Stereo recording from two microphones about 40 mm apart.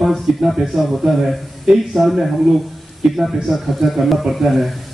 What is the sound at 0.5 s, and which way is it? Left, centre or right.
A man's voice, centre.